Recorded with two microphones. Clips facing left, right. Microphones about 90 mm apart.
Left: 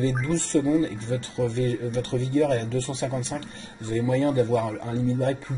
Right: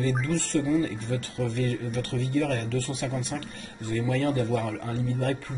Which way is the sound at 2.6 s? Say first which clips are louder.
Left 2 dB; 25° left (ahead or behind).